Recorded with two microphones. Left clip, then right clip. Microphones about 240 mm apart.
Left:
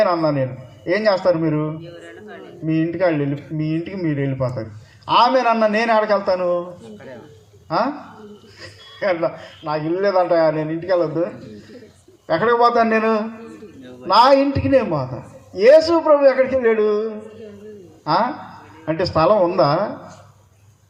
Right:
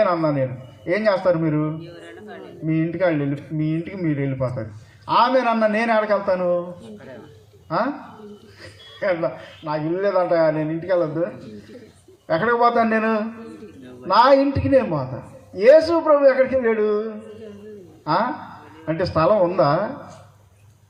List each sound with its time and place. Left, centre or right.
0.0 s a man's voice: left
1.8 s speech: centre
2.6 s a man's voice: left
7.7 s a man's voice: left
12.3 s a man's voice: left